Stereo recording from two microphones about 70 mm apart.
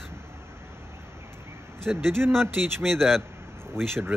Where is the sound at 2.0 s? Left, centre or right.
Right.